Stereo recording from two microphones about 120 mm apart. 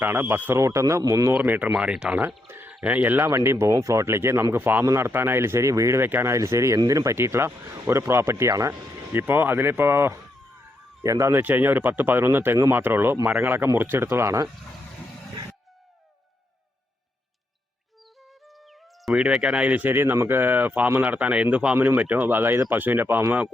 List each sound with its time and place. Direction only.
0.0 s speech: 20° right (ahead or behind)
1.3 s speech: 15° right (ahead or behind)
2.5 s a sound: 20° right (ahead or behind)
2.7 s speech: 10° right (ahead or behind)
18.4 s speech: centre (ahead or behind)